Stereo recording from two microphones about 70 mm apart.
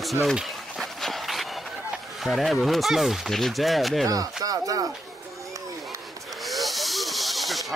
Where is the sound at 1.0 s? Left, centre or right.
Centre.